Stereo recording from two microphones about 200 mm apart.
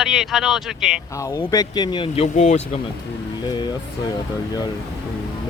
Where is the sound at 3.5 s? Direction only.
20° left (ahead or behind).